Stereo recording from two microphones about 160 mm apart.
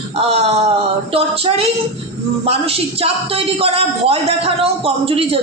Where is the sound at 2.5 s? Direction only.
40° right (ahead or behind).